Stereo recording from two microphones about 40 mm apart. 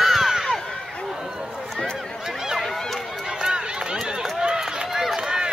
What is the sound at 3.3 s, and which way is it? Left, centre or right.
Run, centre.